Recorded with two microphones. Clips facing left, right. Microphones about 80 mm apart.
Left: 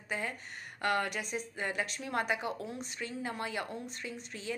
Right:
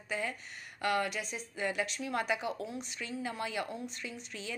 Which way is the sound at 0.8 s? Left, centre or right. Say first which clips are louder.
Even; left.